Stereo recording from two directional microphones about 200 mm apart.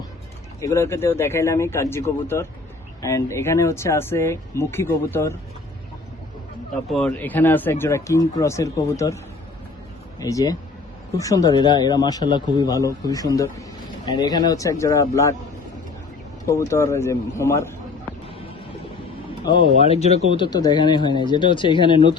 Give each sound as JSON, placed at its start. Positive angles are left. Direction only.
{"t": 0.6, "sound": "speech", "side_deg": 15}
{"t": 6.9, "sound": "speech", "side_deg": 5}
{"t": 10.2, "sound": "a man's voice", "side_deg": 15}
{"t": 16.5, "sound": "speech", "side_deg": 15}
{"t": 19.5, "sound": "a man's voice", "side_deg": 20}
{"t": 19.8, "sound": "speech", "side_deg": 30}
{"t": 20.3, "sound": "a man's voice", "side_deg": 20}